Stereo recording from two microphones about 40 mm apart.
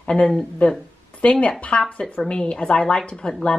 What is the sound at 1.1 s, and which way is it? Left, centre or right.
Speech, left.